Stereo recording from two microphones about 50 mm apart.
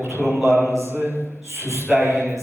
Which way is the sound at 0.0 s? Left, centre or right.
Right.